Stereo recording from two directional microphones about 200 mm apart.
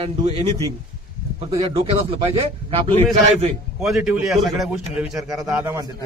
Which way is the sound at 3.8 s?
5° right (ahead or behind).